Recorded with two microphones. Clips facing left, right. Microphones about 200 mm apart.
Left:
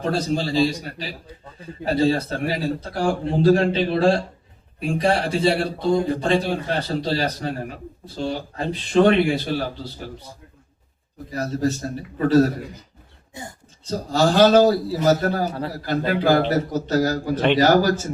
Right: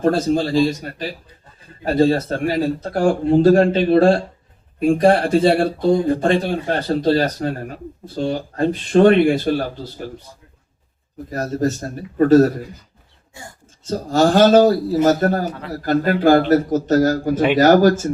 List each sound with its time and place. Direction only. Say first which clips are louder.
0.0 s speech: right 6 dB; 50° right (ahead or behind)
11.3 s speech: right 2 dB; 50° right (ahead or behind)
14.1 s speech: right 3 dB; 50° right (ahead or behind)